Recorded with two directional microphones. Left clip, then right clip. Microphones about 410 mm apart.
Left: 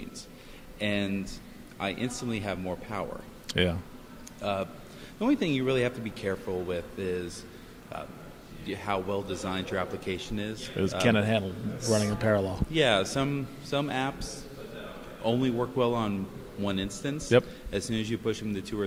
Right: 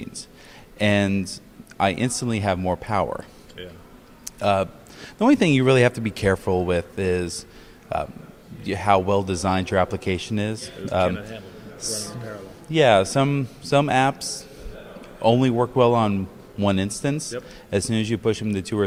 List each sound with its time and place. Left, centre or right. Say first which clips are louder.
0.8 s speech: right 10 dB; right
4.4 s a man's voice: right 10 dB; right
11.0 s a man's voice: right 1 dB; left
11.8 s speech: left 4 dB; right